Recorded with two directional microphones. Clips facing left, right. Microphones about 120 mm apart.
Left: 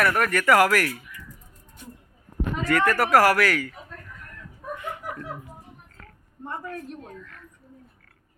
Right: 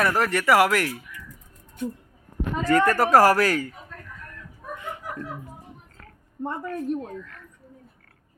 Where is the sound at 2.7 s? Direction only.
35° right (ahead or behind).